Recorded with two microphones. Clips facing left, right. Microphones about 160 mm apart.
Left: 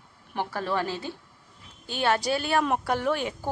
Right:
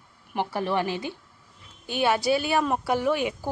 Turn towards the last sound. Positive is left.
turn(degrees=-10)  # may be behind; listen again after turning